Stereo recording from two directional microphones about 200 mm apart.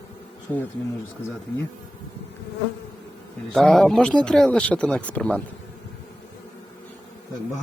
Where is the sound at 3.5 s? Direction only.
5° left (ahead or behind).